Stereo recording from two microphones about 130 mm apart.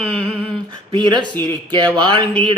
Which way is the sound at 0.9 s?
35° right (ahead or behind).